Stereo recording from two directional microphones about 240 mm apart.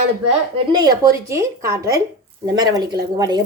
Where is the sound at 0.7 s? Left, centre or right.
Centre.